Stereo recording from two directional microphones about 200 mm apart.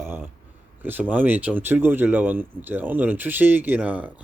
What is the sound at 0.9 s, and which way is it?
Speech, 10° right (ahead or behind).